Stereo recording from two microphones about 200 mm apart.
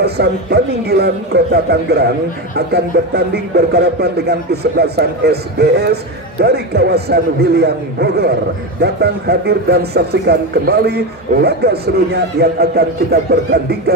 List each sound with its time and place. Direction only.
0.0 s speech: 55° right (ahead or behind)